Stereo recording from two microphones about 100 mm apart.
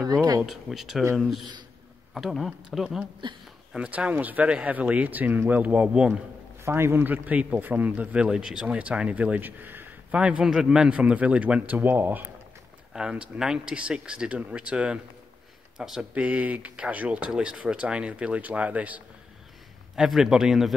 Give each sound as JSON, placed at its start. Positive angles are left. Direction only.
{"t": 0.0, "sound": "speech", "side_deg": -40}
{"t": 0.5, "sound": "a man's voice", "side_deg": 0}
{"t": 6.6, "sound": "a man's voice", "side_deg": -25}
{"t": 16.2, "sound": "a man's voice", "side_deg": -15}
{"t": 20.0, "sound": "speech", "side_deg": -5}